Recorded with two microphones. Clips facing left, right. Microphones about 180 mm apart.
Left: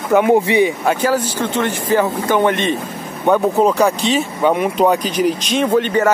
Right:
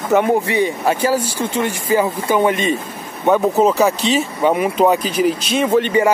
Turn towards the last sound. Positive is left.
turn(degrees=-5)  # may be behind; listen again after turning